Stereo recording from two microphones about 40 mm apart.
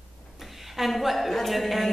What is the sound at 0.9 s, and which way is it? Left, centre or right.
Speech, centre.